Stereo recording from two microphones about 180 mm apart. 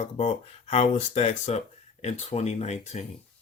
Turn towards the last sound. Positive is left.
turn(degrees=40)  # may be behind; listen again after turning